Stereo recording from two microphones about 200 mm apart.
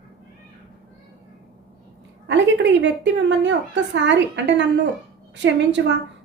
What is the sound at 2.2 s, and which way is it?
A woman's voice, 65° right (ahead or behind).